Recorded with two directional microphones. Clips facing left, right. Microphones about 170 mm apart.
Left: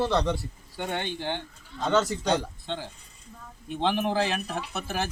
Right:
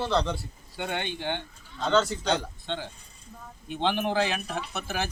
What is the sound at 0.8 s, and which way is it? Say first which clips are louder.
Speech: left 1 dB; 5° left (ahead or behind).